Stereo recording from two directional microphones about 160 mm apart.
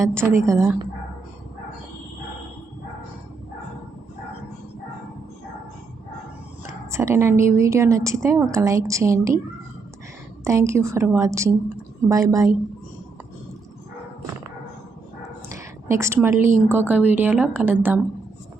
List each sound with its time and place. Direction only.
0.4 s a woman's voice: 15° right (ahead or behind)
6.9 s a woman's voice: 15° right (ahead or behind)
10.4 s a woman's voice: 20° right (ahead or behind)
15.4 s a woman's voice: 20° right (ahead or behind)